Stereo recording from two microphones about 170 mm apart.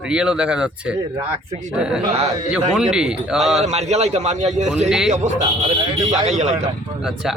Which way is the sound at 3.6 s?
40° right (ahead or behind).